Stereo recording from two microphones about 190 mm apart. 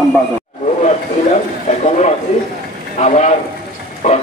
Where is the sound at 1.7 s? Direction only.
40° left (ahead or behind).